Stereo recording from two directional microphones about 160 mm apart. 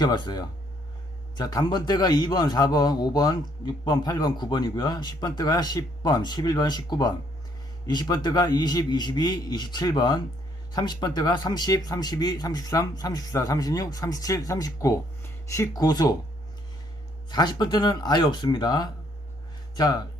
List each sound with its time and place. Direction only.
0.0 s a man's voice: 25° left (ahead or behind)
17.3 s a man's voice: 25° left (ahead or behind)